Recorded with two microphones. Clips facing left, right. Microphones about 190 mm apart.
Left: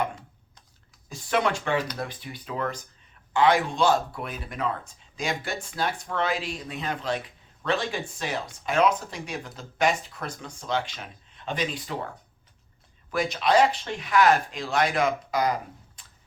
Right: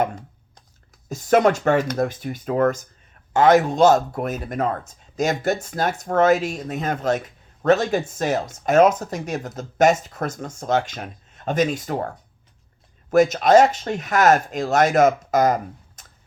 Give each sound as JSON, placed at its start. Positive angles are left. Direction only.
{"t": 1.0, "sound": "speech", "side_deg": -45}